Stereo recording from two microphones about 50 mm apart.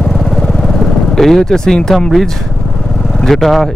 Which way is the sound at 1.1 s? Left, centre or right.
Centre.